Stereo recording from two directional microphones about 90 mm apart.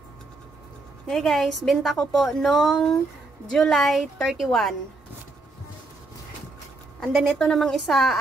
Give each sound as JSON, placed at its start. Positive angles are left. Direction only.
{"t": 1.1, "sound": "a woman's voice", "side_deg": 5}
{"t": 7.2, "sound": "a woman's voice", "side_deg": 0}